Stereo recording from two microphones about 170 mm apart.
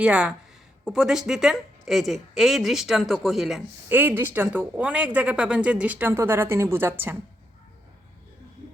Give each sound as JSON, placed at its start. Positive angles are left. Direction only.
{"t": 0.0, "sound": "a woman's voice", "side_deg": -5}
{"t": 3.8, "sound": "speech", "side_deg": -10}